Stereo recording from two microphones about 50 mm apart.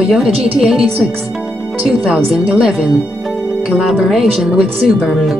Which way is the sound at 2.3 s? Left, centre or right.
Centre.